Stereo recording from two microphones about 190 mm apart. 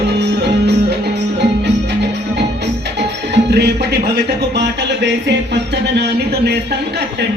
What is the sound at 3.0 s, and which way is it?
Speech, 65° right (ahead or behind).